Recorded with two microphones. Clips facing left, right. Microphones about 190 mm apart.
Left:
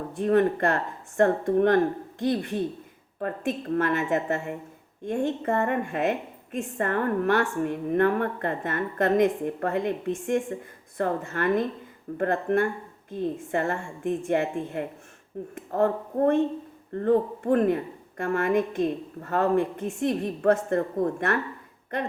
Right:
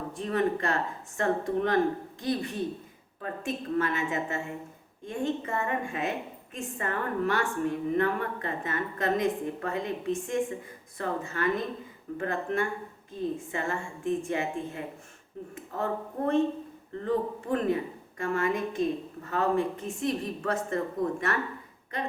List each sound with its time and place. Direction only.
0.2 s a woman's voice: 55° left (ahead or behind)